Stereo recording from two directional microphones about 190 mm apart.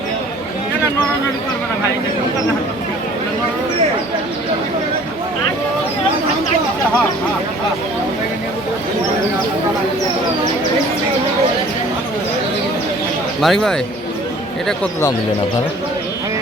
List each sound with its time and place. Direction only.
13.4 s speech: centre (ahead or behind)